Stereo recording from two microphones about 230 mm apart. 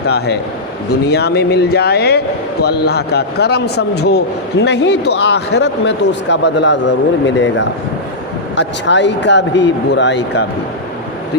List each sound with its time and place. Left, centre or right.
0.0 s a man's voice: left